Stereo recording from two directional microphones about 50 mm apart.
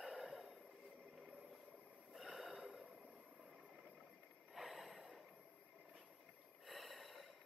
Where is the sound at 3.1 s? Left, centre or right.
Centre.